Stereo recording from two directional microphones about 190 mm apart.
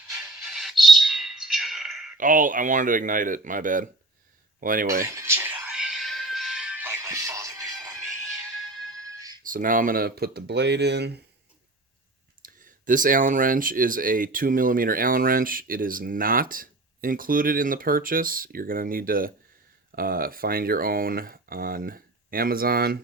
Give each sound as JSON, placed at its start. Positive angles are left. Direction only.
{"t": 0.4, "sound": "squawk", "side_deg": 0}
{"t": 2.1, "sound": "speech", "side_deg": -45}
{"t": 5.0, "sound": "music", "side_deg": -15}
{"t": 9.0, "sound": "music", "side_deg": -20}
{"t": 9.4, "sound": "speech", "side_deg": -45}
{"t": 12.4, "sound": "speech", "side_deg": -45}